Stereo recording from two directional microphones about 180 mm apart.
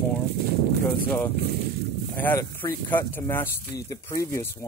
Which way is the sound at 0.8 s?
10° left (ahead or behind).